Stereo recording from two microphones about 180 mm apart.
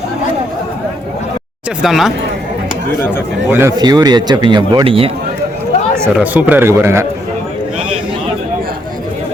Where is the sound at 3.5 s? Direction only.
15° right (ahead or behind); by 5.1 s 30° right (ahead or behind).